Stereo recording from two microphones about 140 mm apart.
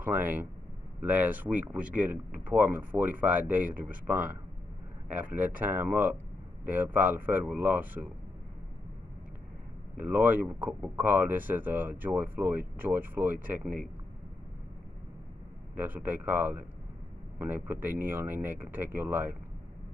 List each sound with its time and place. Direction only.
0.0 s speech: 15° right (ahead or behind)
9.9 s speech: 15° right (ahead or behind)
15.7 s speech: 10° right (ahead or behind)